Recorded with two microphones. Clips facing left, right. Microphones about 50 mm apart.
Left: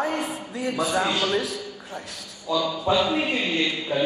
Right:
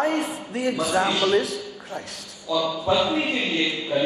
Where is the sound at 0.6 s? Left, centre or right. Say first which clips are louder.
Right 4 dB; right.